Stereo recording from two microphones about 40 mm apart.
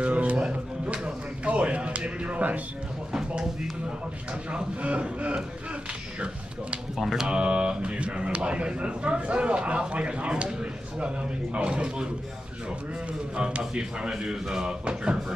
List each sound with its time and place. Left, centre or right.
0.0 s music: right
3.1 s speech: centre
4.3 s speech: right
7.0 s speech: centre
7.2 s speech: right
13.6 s speech: right